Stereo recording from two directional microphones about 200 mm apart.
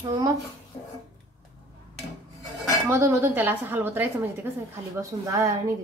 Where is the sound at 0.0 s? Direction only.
20° right (ahead or behind).